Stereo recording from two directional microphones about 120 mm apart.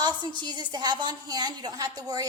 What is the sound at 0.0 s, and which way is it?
A woman's voice, 35° right (ahead or behind).